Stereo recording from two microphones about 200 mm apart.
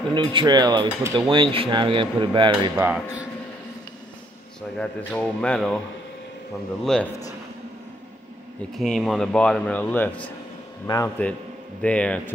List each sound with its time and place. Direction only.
0.1 s speech: 25° right (ahead or behind)
2.7 s speech: 10° right (ahead or behind)
4.7 s speech: 5° left (ahead or behind)
6.8 s speech: 5° left (ahead or behind)
8.7 s a man's voice: centre (ahead or behind)